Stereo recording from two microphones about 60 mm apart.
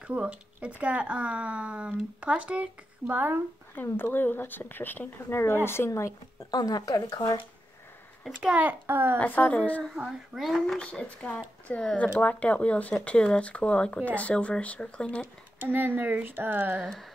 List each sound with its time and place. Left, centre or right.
0.0 s speech: right
3.8 s speech: left
5.9 s speech: left
6.6 s speech: left
8.4 s a child's voice: centre
8.8 s speech: right
9.2 s speech: left
10.0 s speech: centre
10.8 s speech: centre
15.6 s speech: right